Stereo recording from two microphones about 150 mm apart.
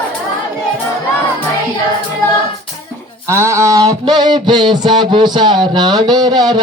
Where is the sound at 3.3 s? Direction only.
20° right (ahead or behind).